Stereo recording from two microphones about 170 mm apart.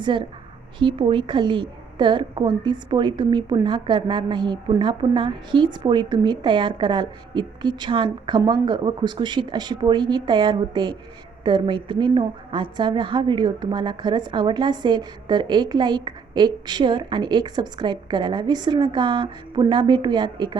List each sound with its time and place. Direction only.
0.0 s a woman's voice: 30° right (ahead or behind)